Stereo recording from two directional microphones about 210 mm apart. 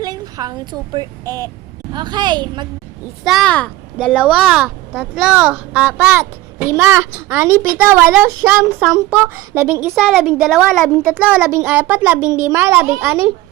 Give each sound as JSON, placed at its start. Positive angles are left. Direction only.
{"t": 0.0, "sound": "a woman's voice", "side_deg": -20}
{"t": 3.2, "sound": "a woman's voice", "side_deg": 0}